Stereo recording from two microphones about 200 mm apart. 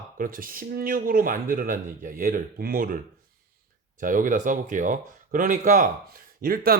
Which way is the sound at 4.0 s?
40° right (ahead or behind).